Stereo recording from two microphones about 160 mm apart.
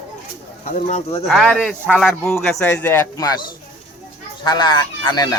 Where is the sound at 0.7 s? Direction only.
50° left (ahead or behind).